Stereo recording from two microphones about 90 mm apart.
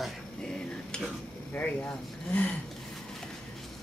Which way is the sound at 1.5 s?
20° left (ahead or behind).